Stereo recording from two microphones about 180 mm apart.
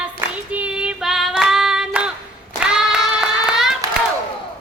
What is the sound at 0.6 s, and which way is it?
Hands, 5° right (ahead or behind).